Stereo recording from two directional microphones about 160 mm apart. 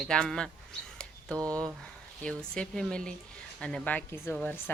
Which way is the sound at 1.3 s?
20° right (ahead or behind).